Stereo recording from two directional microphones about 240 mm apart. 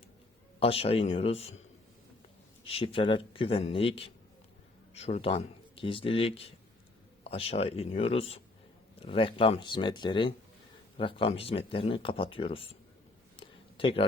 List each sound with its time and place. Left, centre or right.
0.6 s speech: left
2.6 s speech: left
13.3 s a sound: left